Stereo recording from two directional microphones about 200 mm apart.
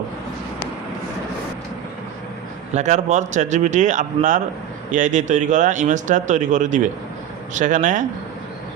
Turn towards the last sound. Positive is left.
turn(degrees=-40)  # may be behind; listen again after turning